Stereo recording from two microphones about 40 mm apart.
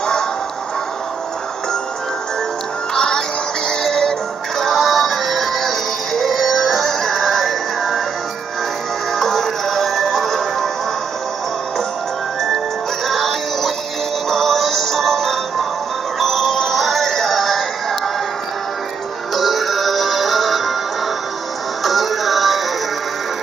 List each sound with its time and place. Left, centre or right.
0.0 s music: centre
2.9 s synthetic singing: centre
9.1 s music: centre
13.0 s music: centre
16.2 s synthetic singing: centre
19.3 s music: centre
21.8 s music: centre